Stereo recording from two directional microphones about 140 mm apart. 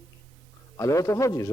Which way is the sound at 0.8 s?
20° left (ahead or behind).